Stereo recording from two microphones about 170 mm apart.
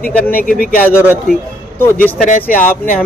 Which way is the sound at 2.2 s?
50° left (ahead or behind).